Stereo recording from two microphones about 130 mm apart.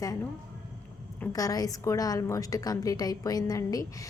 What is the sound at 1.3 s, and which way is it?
A woman's voice, 30° left (ahead or behind).